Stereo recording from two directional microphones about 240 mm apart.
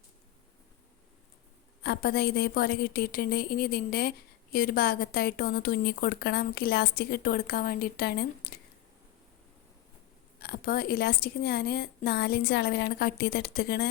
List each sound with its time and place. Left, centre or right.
1.8 s a woman's voice: left
10.4 s a woman's voice: left